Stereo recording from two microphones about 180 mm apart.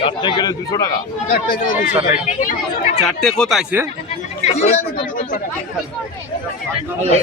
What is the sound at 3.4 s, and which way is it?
Speech, centre (ahead or behind).